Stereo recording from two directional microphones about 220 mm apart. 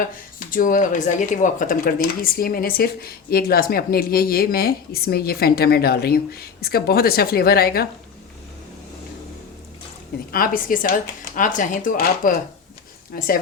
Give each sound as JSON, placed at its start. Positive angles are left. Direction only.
{"t": 0.5, "sound": "speech", "side_deg": 40}
{"t": 10.3, "sound": "speech", "side_deg": 40}